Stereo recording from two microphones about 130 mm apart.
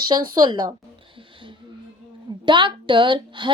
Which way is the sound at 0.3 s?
35° right (ahead or behind).